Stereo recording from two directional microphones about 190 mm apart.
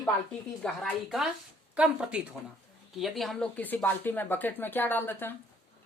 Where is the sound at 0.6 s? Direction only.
Centre (ahead or behind).